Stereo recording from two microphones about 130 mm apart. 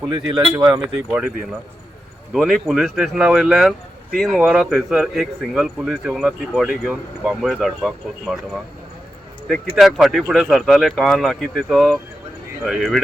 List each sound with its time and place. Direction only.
0.1 s speech: 35° right (ahead or behind)
0.6 s speech: 5° right (ahead or behind)
2.3 s speech: 5° right (ahead or behind)
9.5 s speech: centre (ahead or behind)